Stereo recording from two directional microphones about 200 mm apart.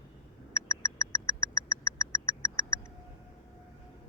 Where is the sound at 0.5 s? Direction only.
15° left (ahead or behind).